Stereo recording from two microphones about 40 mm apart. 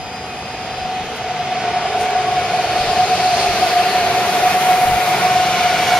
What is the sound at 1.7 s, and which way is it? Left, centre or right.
Train, centre.